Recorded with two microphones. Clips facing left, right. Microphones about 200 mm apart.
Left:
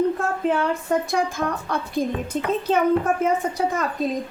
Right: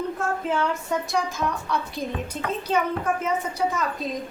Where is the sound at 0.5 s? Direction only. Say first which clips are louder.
Left 3 dB; 55° left (ahead or behind).